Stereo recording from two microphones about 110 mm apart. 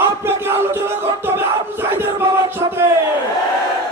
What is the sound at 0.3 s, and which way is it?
Crowd, 20° right (ahead or behind).